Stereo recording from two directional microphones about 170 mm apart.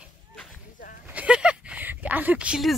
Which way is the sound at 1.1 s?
5° right (ahead or behind).